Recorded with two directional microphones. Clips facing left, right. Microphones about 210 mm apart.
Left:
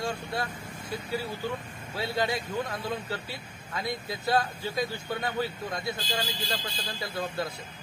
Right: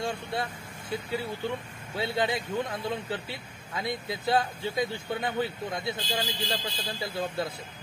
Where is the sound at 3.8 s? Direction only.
20° right (ahead or behind).